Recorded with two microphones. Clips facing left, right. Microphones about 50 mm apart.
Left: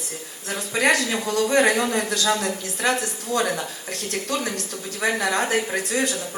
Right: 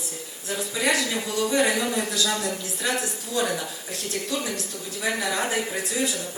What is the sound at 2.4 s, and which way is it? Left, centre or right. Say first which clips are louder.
A woman's voice: left 3 dB; left.